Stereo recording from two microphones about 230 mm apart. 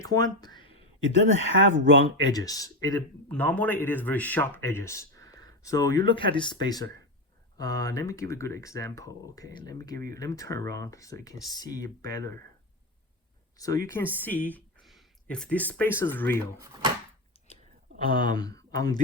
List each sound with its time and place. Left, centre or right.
0.0 s speech: centre
0.9 s speech: right
2.3 s speech: centre
13.6 s speech: centre
18.1 s speech: centre